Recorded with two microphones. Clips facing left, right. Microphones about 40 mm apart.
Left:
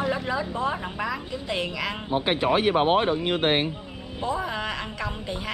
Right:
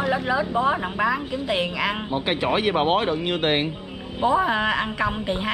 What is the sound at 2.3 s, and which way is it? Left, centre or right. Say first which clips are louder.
Speech: even; right.